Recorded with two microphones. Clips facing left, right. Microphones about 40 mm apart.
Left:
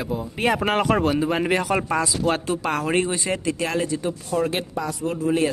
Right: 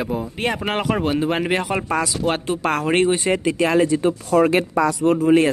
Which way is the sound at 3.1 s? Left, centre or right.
Right.